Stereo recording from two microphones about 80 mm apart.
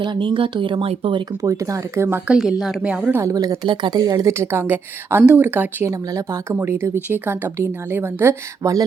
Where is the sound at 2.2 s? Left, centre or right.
Centre.